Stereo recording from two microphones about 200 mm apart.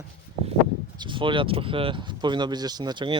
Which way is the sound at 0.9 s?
25° right (ahead or behind).